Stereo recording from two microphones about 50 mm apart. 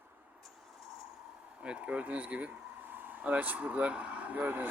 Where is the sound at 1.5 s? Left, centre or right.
Right.